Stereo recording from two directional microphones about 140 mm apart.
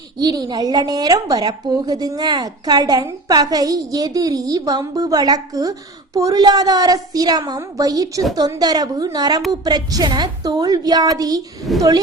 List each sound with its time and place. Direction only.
0.2 s a woman's voice: 30° right (ahead or behind)
11.7 s a woman's voice: centre (ahead or behind)